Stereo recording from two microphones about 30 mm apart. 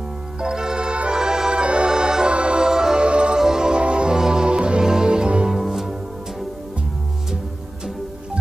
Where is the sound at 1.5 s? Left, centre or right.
Right.